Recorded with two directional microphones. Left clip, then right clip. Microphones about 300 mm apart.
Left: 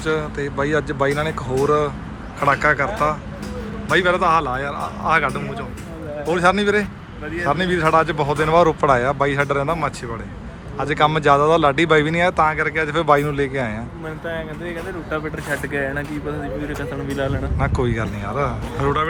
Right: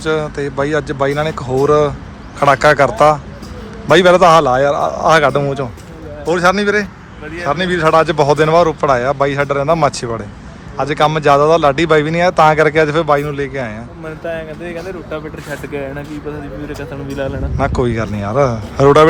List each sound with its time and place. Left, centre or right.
0.0 s speech: centre
14.3 s speech: right
15.7 s speech: centre
17.2 s speech: centre